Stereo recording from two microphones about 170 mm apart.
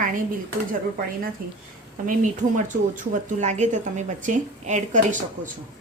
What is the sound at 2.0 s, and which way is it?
A woman's voice, 50° right (ahead or behind).